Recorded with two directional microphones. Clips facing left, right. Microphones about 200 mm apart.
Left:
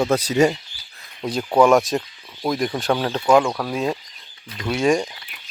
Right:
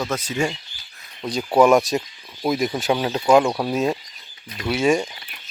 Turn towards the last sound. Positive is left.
turn(degrees=0)  # may be behind; listen again after turning